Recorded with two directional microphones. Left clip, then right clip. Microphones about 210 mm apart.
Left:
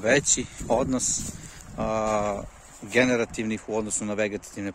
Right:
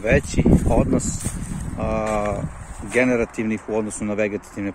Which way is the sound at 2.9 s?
15° left (ahead or behind).